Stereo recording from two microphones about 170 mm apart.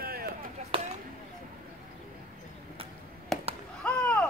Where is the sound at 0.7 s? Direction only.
30° right (ahead or behind).